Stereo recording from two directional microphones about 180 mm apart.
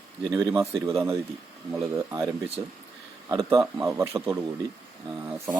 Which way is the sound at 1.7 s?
15° right (ahead or behind).